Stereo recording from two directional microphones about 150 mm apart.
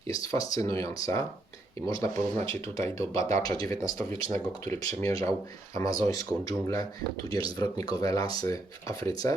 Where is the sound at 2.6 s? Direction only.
20° left (ahead or behind).